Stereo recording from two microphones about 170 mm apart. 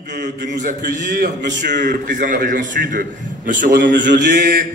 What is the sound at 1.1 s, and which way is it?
Speech, 60° right (ahead or behind).